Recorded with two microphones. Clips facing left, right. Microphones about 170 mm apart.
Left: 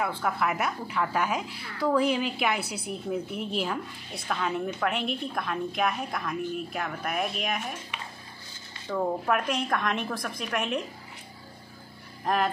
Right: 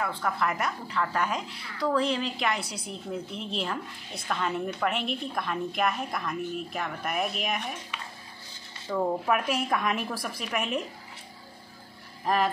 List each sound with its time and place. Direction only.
0.0 s a woman's voice: 5° left (ahead or behind)
8.8 s a woman's voice: centre (ahead or behind)
12.3 s a woman's voice: centre (ahead or behind)